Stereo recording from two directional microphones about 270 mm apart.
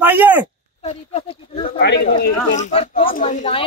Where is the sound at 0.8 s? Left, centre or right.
Left.